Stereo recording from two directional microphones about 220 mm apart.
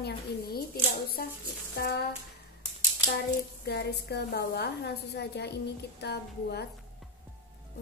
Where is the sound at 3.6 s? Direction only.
50° left (ahead or behind).